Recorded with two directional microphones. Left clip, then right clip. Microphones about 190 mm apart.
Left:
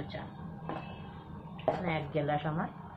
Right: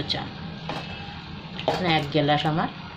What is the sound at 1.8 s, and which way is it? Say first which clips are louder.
Speech: right 11 dB; 65° right (ahead or behind).